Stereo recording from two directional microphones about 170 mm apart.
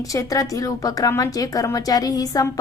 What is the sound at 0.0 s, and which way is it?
A woman's voice, 20° left (ahead or behind).